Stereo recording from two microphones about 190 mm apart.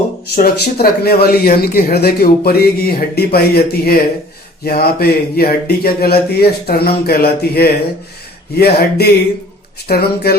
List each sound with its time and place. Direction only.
0.3 s speech: 55° left (ahead or behind)